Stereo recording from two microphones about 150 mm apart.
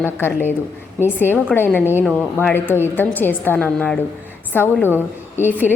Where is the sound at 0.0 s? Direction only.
15° left (ahead or behind).